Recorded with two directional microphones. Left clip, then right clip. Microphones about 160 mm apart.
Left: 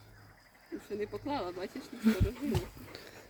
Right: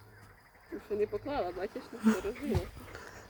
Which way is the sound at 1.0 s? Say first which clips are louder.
Right 3 dB; 70° left (ahead or behind).